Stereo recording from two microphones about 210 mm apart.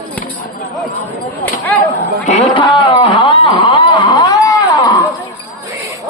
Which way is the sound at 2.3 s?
25° left (ahead or behind).